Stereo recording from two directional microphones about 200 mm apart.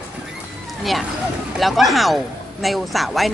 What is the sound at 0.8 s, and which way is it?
Speech, centre (ahead or behind).